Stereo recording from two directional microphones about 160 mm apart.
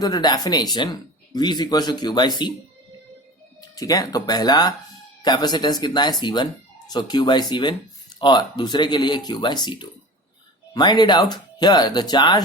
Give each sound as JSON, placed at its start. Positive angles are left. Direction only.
{"t": 0.0, "sound": "speech", "side_deg": 25}
{"t": 3.6, "sound": "speech", "side_deg": 25}